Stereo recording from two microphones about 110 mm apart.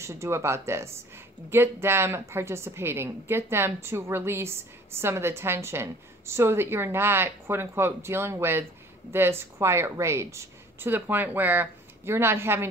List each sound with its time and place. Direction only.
0.0 s a woman's voice: 25° right (ahead or behind)